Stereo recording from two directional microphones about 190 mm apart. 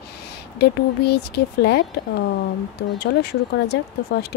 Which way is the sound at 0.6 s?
60° left (ahead or behind).